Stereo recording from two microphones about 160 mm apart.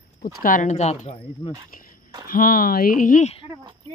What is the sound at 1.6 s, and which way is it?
Speech, 60° left (ahead or behind).